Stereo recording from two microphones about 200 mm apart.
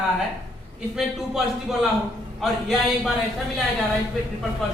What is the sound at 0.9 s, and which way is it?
Speech, centre (ahead or behind).